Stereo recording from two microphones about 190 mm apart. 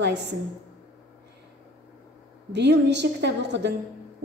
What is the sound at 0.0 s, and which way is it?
Speech, 65° right (ahead or behind).